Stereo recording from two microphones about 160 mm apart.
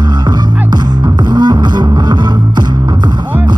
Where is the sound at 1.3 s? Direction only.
25° right (ahead or behind).